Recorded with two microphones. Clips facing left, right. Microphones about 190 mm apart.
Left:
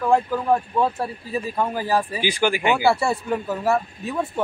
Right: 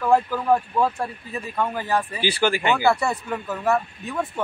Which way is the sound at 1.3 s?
30° left (ahead or behind).